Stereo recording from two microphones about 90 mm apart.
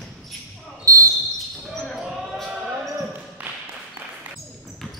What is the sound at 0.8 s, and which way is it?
Basketball bounce, 35° right (ahead or behind).